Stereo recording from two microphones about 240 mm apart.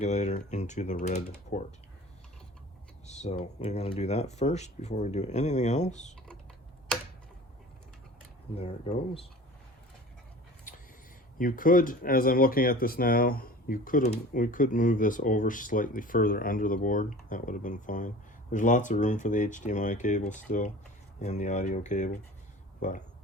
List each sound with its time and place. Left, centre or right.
0.0 s speech: left
3.1 s speech: left
8.5 s speech: left
11.3 s speech: left